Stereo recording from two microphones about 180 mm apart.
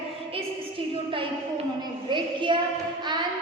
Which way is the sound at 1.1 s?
30° right (ahead or behind).